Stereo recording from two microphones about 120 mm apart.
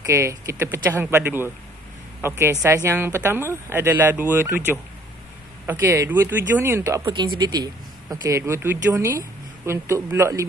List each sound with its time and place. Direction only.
0.0 s speech: 25° right (ahead or behind)
7.1 s speech: 40° right (ahead or behind); by 10.4 s 20° right (ahead or behind)